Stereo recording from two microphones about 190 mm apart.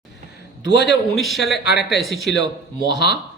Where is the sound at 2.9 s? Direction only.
60° left (ahead or behind).